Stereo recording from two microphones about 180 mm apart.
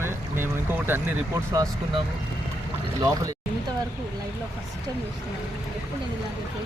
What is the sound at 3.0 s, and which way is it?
Speech, 20° right (ahead or behind).